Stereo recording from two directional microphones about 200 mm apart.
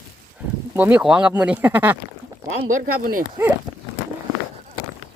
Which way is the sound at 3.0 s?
45° right (ahead or behind).